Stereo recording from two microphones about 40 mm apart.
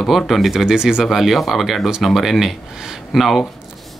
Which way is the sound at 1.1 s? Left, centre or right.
Centre.